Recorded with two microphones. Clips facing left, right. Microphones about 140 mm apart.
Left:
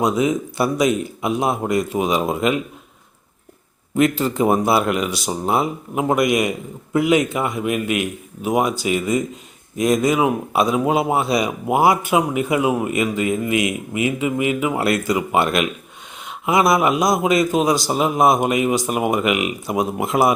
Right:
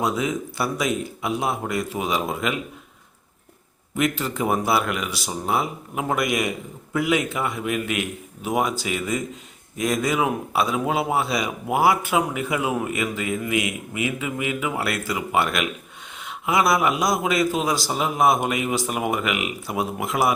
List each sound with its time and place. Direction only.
0.0 s speech: 15° left (ahead or behind)
3.9 s speech: 30° left (ahead or behind)